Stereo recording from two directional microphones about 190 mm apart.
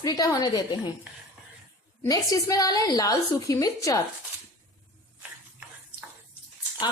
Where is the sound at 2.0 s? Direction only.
20° left (ahead or behind).